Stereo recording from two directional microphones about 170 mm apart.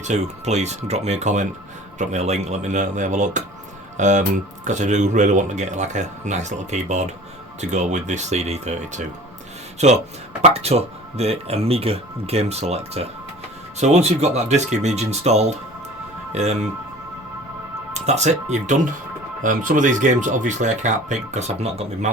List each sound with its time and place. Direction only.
0.0 s speech: 40° right (ahead or behind)
17.9 s speech: 40° right (ahead or behind)